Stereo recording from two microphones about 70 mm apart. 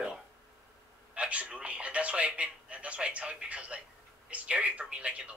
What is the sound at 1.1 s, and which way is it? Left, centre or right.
A man's voice, centre.